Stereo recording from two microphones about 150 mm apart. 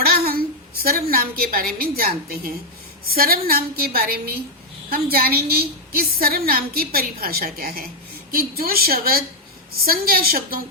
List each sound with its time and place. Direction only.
0.0 s a woman's voice: 90° right